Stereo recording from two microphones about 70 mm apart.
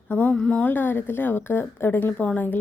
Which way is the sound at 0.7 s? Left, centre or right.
Left.